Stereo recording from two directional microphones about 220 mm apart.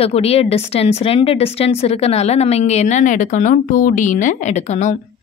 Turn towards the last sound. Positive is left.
turn(degrees=30)  # may be behind; listen again after turning